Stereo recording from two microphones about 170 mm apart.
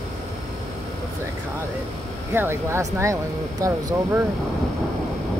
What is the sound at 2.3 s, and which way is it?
Speech, 15° right (ahead or behind).